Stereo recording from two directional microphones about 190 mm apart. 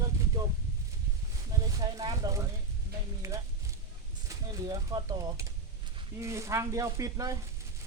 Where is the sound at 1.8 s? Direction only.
20° right (ahead or behind).